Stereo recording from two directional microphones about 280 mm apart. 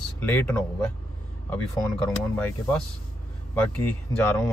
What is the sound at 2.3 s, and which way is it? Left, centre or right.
Speech, centre.